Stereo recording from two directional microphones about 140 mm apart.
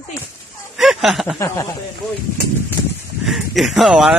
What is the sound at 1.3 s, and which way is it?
Speech, 20° left (ahead or behind).